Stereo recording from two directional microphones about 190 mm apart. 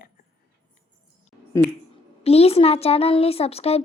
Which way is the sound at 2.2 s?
30° left (ahead or behind).